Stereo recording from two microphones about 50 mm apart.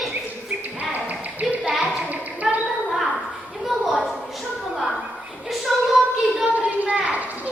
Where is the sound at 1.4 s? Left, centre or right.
Centre.